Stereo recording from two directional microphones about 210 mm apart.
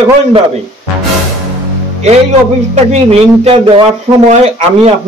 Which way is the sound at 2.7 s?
30° right (ahead or behind).